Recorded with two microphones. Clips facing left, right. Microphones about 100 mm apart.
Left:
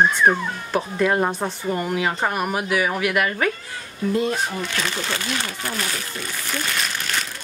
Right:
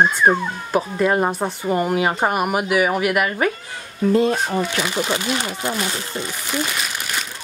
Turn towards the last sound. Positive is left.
turn(degrees=-10)  # may be behind; listen again after turning